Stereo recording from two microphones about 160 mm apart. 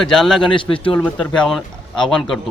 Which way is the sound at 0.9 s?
5° left (ahead or behind).